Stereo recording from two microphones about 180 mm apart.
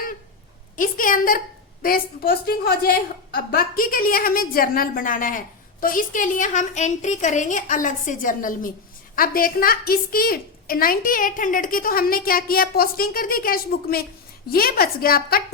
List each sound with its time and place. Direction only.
0.8 s a woman's voice: 50° left (ahead or behind)